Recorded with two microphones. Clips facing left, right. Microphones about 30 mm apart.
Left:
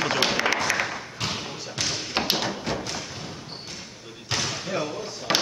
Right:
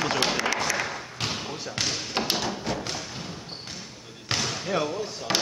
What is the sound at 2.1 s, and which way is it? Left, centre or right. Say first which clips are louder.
Thump: left 2 dB; centre.